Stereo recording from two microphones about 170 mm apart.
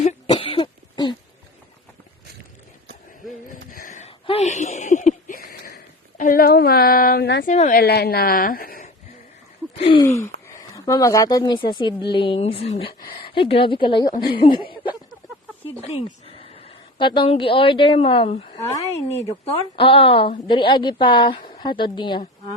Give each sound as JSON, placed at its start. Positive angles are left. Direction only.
{"t": 0.0, "sound": "cough", "side_deg": 40}
{"t": 3.5, "sound": "a sound", "side_deg": 50}
{"t": 7.4, "sound": "a woman's voice", "side_deg": 45}
{"t": 7.8, "sound": "a woman's voice", "side_deg": 70}
{"t": 9.7, "sound": "a sound", "side_deg": 30}
{"t": 10.1, "sound": "a sound", "side_deg": 15}
{"t": 10.6, "sound": "speech", "side_deg": 20}
{"t": 14.2, "sound": "a woman's voice", "side_deg": 65}
{"t": 14.4, "sound": "a sound", "side_deg": 30}
{"t": 16.0, "sound": "speech", "side_deg": 35}
{"t": 18.6, "sound": "speech", "side_deg": 15}
{"t": 19.5, "sound": "a woman's voice", "side_deg": 30}